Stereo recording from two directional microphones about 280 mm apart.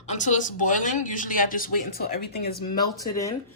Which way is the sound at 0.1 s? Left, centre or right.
Left.